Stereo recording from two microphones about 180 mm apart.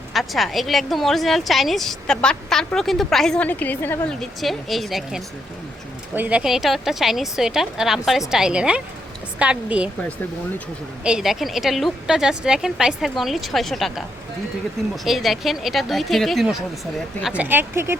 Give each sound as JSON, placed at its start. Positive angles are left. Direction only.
{"t": 0.1, "sound": "a woman's voice", "side_deg": 0}
{"t": 11.0, "sound": "a woman's voice", "side_deg": -5}
{"t": 15.0, "sound": "a woman's voice", "side_deg": 0}